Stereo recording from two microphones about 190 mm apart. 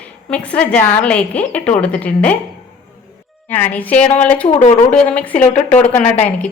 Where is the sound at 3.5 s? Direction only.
10° left (ahead or behind).